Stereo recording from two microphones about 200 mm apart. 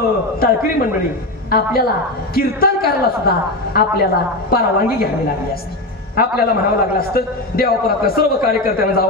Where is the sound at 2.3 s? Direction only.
50° left (ahead or behind).